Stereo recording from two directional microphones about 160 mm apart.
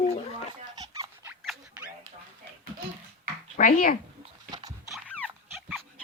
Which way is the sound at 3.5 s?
55° left (ahead or behind).